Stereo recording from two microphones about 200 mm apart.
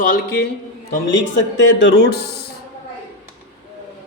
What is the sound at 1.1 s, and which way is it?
Speech, 65° left (ahead or behind).